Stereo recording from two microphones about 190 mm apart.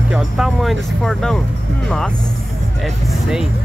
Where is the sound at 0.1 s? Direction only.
Centre (ahead or behind).